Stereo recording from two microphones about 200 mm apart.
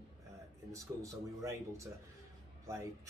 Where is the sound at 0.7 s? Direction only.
15° right (ahead or behind).